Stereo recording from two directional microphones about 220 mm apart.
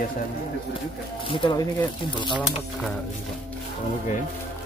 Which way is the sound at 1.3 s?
20° left (ahead or behind).